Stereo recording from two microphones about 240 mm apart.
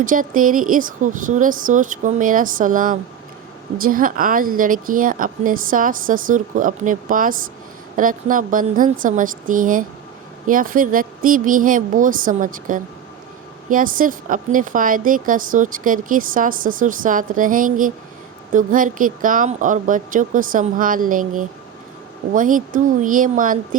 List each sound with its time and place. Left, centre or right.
0.0 s a woman's voice: right